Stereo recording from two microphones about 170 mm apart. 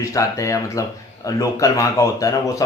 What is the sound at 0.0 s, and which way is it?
Speech, 20° left (ahead or behind).